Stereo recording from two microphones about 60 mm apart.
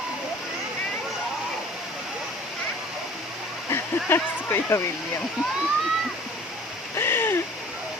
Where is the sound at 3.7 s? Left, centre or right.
Left.